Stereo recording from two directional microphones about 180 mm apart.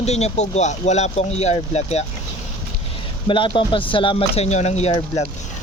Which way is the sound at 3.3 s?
25° left (ahead or behind).